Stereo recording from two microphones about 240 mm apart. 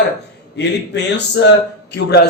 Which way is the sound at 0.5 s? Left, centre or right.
Left.